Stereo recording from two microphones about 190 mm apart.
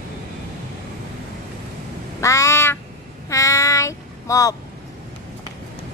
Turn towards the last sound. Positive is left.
turn(degrees=15)  # may be behind; listen again after turning